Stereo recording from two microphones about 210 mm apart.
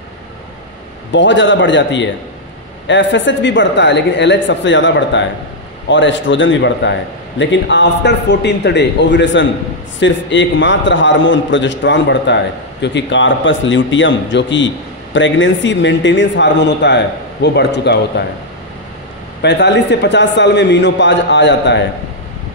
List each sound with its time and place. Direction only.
1.1 s a man's voice: 60° left (ahead or behind)
19.4 s a man's voice: 55° left (ahead or behind)